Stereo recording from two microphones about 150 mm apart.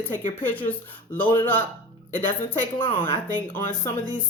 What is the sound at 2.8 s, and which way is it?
Speech, 35° left (ahead or behind).